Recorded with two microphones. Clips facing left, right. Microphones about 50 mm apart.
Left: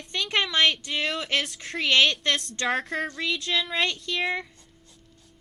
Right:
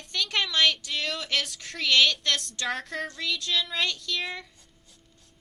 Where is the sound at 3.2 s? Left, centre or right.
Centre.